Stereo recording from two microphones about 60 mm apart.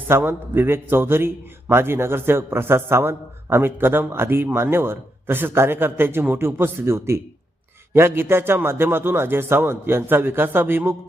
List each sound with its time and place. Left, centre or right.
0.2 s a man's voice: right